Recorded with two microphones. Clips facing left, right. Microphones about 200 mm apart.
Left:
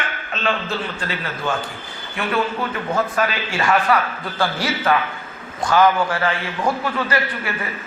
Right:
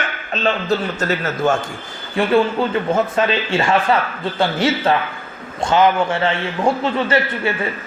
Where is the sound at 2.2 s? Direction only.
30° right (ahead or behind).